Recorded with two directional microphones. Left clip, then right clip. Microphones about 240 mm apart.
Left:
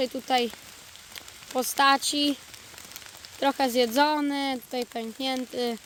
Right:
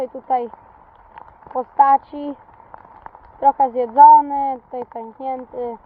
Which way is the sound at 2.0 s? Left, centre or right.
Centre.